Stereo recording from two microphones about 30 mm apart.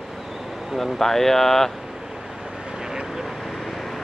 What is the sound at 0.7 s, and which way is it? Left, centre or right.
Speech, centre.